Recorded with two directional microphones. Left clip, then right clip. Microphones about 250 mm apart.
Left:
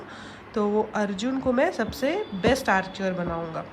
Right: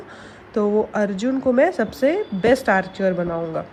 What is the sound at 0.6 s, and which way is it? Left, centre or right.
Speech, left.